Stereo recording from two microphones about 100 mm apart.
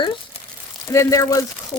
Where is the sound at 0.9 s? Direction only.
30° left (ahead or behind).